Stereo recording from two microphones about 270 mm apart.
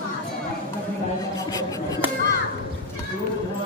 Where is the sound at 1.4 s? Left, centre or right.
Centre.